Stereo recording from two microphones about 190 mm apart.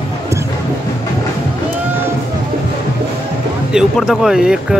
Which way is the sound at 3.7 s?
5° right (ahead or behind).